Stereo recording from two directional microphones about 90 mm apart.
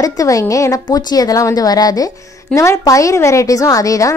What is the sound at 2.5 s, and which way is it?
A woman's voice, 35° left (ahead or behind).